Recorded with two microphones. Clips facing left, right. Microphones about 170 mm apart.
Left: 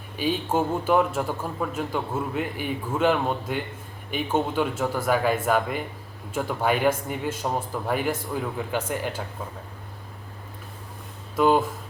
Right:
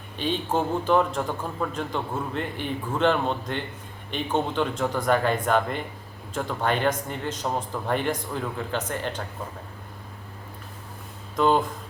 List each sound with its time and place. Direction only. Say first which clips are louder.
0.2 s a man's voice: left 1 dB; 10° left (ahead or behind)
11.3 s a man's voice: left 1 dB; 5° left (ahead or behind)